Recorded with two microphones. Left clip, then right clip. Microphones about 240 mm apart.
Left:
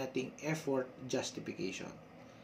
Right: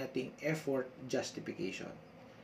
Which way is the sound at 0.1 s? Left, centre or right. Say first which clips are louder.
Right 1 dB; centre.